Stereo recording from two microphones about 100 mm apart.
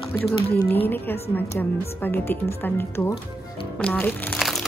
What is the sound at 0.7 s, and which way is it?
A woman's voice, 20° left (ahead or behind).